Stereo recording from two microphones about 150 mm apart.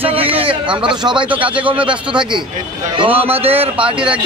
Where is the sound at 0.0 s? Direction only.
40° right (ahead or behind).